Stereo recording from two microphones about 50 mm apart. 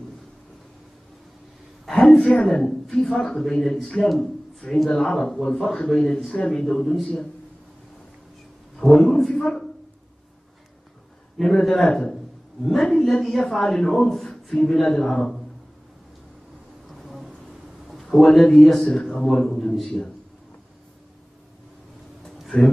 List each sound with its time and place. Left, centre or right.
1.9 s a sound: centre
2.4 s speech: centre
5.9 s speech: centre
8.7 s a man's voice: centre
11.3 s speech: centre
12.9 s speech: centre
16.8 s a sound: centre
18.3 s speech: centre
18.9 s a man's voice: centre
22.2 s a sound: centre